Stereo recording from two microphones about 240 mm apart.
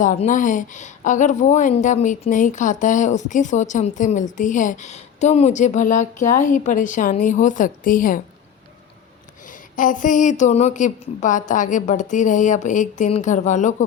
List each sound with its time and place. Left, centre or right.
0.0 s a woman's voice: left
9.5 s a woman's voice: left